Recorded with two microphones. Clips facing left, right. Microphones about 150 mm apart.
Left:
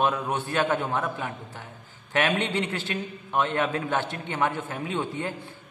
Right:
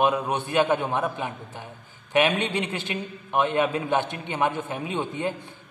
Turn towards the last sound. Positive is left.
turn(degrees=-20)  # may be behind; listen again after turning